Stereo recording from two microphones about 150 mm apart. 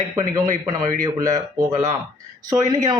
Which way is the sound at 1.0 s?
25° right (ahead or behind).